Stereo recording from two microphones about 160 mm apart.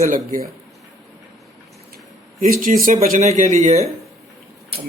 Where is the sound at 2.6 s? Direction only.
60° right (ahead or behind).